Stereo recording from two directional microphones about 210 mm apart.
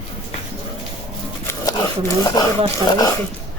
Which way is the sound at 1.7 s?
15° left (ahead or behind).